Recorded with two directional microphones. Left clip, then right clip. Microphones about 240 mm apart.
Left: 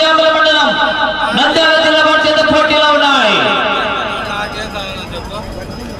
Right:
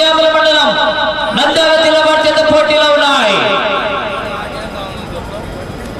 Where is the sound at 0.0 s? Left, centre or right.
Right.